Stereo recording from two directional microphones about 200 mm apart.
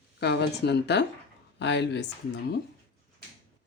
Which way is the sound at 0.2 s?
55° left (ahead or behind).